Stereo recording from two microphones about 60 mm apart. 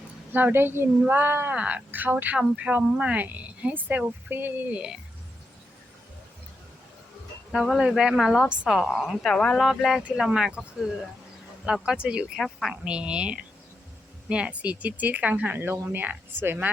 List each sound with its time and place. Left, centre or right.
0.3 s speech: right
1.5 s speech: right
2.3 s speech: right
4.7 s speech: centre
7.5 s speech: centre
7.8 s speech: centre
9.3 s speech: centre
9.6 s speech: centre
12.4 s speech: centre
12.7 s speech: centre
15.5 s speech: right